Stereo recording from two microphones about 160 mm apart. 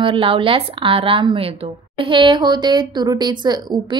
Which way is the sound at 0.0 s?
35° right (ahead or behind).